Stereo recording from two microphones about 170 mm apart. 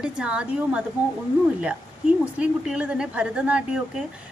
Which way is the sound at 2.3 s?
5° right (ahead or behind).